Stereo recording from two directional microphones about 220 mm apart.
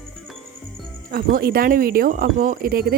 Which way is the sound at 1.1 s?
40° right (ahead or behind).